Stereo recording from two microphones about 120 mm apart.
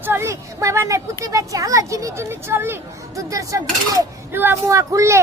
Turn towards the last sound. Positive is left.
turn(degrees=-25)  # may be behind; listen again after turning